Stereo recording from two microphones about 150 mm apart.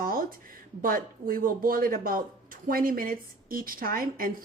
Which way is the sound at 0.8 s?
70° right (ahead or behind).